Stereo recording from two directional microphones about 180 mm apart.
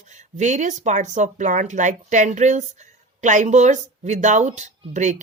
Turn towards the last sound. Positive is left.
turn(degrees=-40)  # may be behind; listen again after turning